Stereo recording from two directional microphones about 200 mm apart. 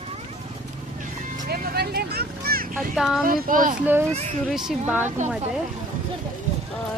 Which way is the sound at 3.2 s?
45° right (ahead or behind).